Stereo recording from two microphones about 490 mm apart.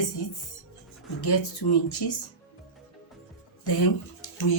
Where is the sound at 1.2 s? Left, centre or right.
Left.